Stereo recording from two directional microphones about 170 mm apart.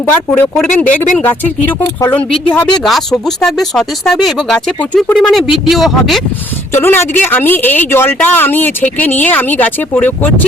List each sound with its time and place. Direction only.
0.5 s speech: 5° left (ahead or behind)
6.7 s speech: 15° left (ahead or behind)